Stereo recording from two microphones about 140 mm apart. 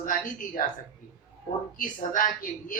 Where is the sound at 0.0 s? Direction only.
75° left (ahead or behind).